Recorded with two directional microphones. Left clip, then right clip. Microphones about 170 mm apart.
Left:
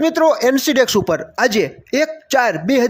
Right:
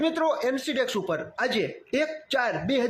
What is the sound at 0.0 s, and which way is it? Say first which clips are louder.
Speech: left 11 dB; 40° left (ahead or behind).